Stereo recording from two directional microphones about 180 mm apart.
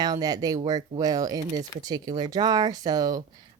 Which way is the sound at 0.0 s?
20° right (ahead or behind).